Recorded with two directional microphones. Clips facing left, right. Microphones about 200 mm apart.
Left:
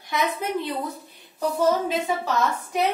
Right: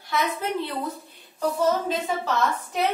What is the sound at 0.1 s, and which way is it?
Speech, 15° left (ahead or behind).